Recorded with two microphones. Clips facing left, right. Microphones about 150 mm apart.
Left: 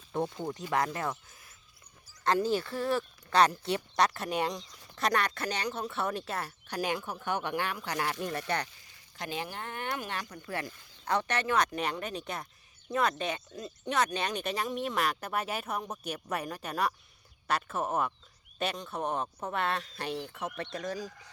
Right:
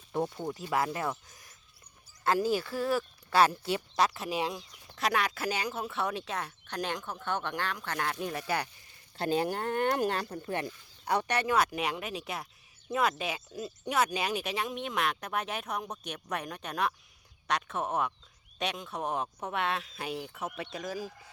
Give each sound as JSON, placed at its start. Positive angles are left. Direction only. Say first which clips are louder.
{"t": 0.1, "sound": "speech", "louder": "even", "side_deg": -10}
{"t": 1.3, "sound": "a sound", "louder": "right 1 dB", "side_deg": -40}
{"t": 2.2, "sound": "speech", "louder": "even", "side_deg": -5}
{"t": 9.1, "sound": "speech", "louder": "right 8 dB", "side_deg": -35}